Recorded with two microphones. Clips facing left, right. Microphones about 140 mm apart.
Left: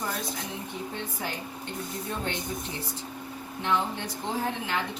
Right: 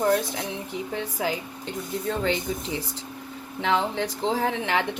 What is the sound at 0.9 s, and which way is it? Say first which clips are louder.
Speech: right 10 dB; 90° right.